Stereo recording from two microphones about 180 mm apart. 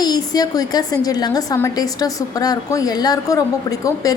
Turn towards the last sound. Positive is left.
turn(degrees=20)  # may be behind; listen again after turning